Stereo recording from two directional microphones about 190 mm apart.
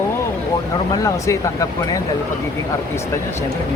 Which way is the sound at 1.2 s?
15° left (ahead or behind).